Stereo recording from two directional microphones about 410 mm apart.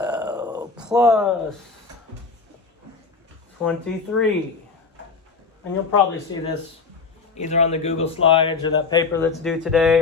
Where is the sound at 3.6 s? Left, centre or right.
Centre.